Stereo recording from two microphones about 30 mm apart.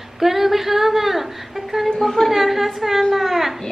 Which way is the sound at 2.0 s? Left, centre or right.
Centre.